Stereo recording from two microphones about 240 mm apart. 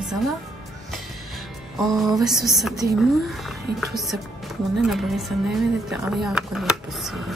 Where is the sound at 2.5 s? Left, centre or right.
Centre.